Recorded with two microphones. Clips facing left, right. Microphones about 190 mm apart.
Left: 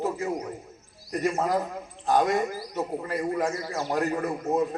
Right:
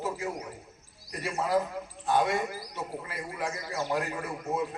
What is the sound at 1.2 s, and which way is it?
A man's voice, 45° left (ahead or behind).